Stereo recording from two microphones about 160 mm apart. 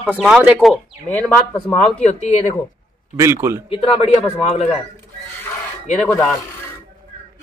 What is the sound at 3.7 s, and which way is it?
Speech, 40° left (ahead or behind).